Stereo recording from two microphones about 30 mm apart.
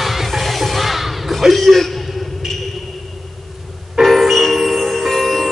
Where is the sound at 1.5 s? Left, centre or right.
Centre.